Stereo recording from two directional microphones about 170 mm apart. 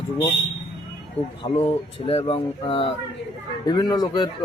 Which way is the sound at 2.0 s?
35° left (ahead or behind).